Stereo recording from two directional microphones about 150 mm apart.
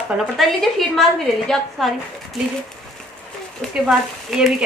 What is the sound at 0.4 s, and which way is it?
Speech, centre (ahead or behind).